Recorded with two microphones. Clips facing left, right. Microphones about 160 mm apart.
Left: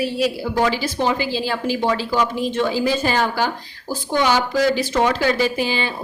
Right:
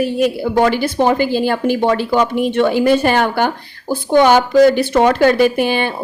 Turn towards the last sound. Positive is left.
turn(degrees=-60)  # may be behind; listen again after turning